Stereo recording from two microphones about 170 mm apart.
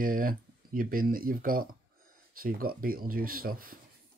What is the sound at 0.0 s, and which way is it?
Speech, 55° right (ahead or behind).